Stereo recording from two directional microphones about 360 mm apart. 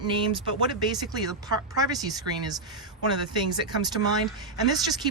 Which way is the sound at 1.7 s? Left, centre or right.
Centre.